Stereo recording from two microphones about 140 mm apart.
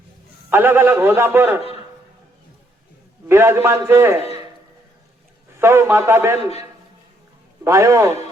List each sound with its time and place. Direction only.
0.5 s a man's voice: 15° right (ahead or behind)
3.2 s a man's voice: 15° right (ahead or behind)
5.5 s a man's voice: 15° right (ahead or behind)
7.6 s a man's voice: 20° right (ahead or behind)